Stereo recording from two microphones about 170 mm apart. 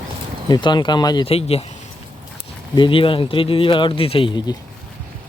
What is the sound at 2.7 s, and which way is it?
Speech, 30° left (ahead or behind).